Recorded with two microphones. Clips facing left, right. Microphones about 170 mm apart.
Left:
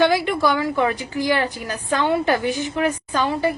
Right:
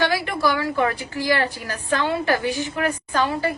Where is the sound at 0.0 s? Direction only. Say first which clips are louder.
Left 4 dB; 20° left (ahead or behind).